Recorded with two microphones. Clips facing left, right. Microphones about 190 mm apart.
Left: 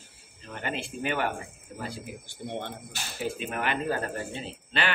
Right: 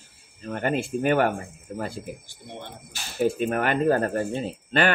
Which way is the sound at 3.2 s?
50° right (ahead or behind).